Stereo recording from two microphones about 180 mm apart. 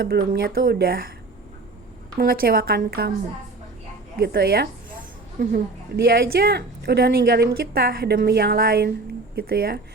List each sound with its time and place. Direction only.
0.0 s speech: 55° right (ahead or behind)
2.1 s speech: 55° right (ahead or behind)
4.2 s speech: 60° right (ahead or behind)
6.0 s speech: 60° right (ahead or behind)